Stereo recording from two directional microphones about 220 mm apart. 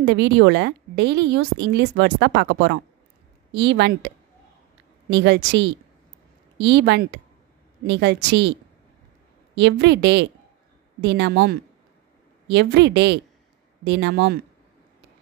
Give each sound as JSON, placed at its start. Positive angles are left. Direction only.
{"t": 0.0, "sound": "a woman's voice", "side_deg": -50}
{"t": 5.1, "sound": "a woman's voice", "side_deg": -50}
{"t": 9.6, "sound": "a woman's voice", "side_deg": -50}